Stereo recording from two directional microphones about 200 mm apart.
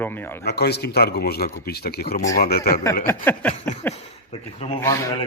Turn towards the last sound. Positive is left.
turn(degrees=15)  # may be behind; listen again after turning